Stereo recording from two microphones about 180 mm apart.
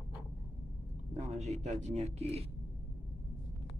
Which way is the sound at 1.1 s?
40° right (ahead or behind).